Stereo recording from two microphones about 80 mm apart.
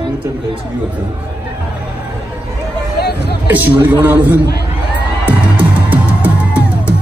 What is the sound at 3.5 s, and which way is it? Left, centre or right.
Speech, right.